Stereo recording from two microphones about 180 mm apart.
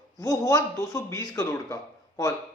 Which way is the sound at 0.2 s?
20° left (ahead or behind).